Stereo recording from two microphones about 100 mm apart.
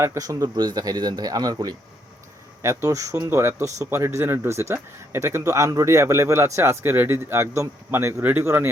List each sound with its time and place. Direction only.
0.0 s speech: 30° right (ahead or behind)
2.6 s speech: 30° right (ahead or behind)